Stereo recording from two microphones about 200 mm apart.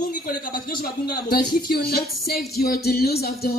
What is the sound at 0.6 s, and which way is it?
Speech, 50° left (ahead or behind).